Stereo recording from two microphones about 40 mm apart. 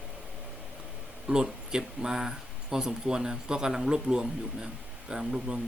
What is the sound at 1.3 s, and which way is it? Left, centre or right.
Speech, centre.